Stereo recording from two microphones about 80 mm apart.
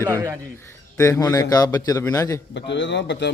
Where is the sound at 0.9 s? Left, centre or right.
Left.